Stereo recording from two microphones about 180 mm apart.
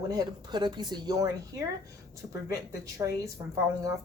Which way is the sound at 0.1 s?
20° right (ahead or behind).